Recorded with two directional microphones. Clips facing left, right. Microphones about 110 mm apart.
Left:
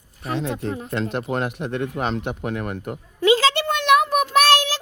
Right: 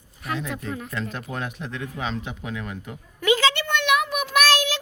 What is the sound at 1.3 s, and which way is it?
Speech, 75° left (ahead or behind).